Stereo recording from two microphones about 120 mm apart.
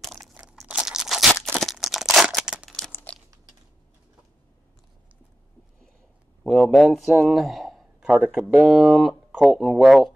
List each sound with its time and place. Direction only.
0.0 s crunch: centre (ahead or behind)
0.7 s crumpling: 5° right (ahead or behind)
2.9 s crumpling: 20° left (ahead or behind)
6.4 s a man's voice: centre (ahead or behind)